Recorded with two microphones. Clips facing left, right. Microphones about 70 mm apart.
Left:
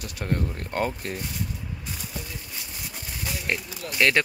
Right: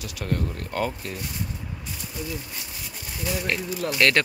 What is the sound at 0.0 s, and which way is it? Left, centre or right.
Speech, left.